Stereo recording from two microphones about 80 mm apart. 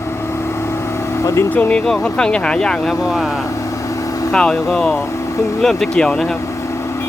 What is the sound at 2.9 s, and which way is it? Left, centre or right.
Speech, centre.